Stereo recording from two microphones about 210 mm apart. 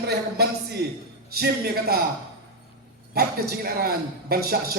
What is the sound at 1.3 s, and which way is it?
Speech, 50° right (ahead or behind).